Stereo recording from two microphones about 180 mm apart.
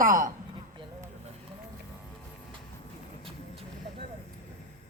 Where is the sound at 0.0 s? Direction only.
50° right (ahead or behind).